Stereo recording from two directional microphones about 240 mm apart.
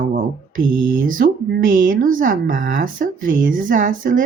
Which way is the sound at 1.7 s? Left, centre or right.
Right.